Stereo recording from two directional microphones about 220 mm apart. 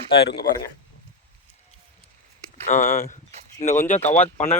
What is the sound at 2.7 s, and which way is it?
Speech, 35° left (ahead or behind).